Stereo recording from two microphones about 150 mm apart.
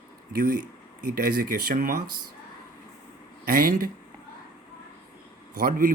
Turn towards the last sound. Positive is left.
turn(degrees=-75)  # may be behind; listen again after turning